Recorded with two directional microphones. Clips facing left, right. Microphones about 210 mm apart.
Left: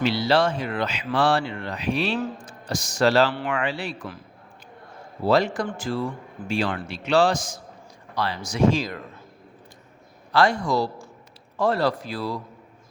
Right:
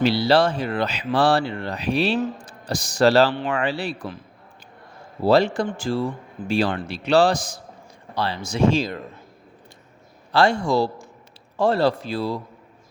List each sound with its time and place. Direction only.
0.0 s speech: 35° right (ahead or behind)
5.2 s speech: 30° right (ahead or behind)
10.3 s speech: 25° right (ahead or behind)